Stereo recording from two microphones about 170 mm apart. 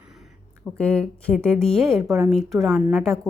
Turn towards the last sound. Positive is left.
turn(degrees=5)  # may be behind; listen again after turning